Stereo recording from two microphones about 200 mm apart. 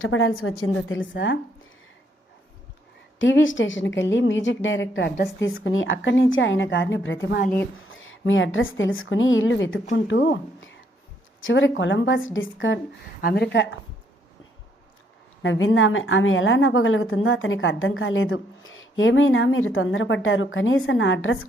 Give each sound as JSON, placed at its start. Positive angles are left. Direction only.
{"t": 0.0, "sound": "a woman's voice", "side_deg": 90}
{"t": 3.2, "sound": "a woman's voice", "side_deg": 75}
{"t": 5.5, "sound": "a woman's voice", "side_deg": 75}
{"t": 10.2, "sound": "a woman's voice", "side_deg": 60}
{"t": 13.2, "sound": "speech", "side_deg": 55}
{"t": 15.4, "sound": "a woman's voice", "side_deg": 80}